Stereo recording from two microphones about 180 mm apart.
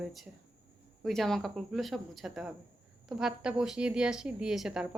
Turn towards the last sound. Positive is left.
turn(degrees=-5)  # may be behind; listen again after turning